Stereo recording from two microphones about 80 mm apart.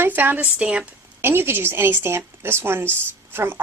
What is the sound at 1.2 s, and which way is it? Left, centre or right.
Speech, right.